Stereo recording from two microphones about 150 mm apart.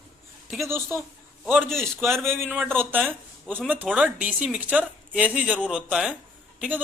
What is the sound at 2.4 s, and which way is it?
Speech, 10° right (ahead or behind).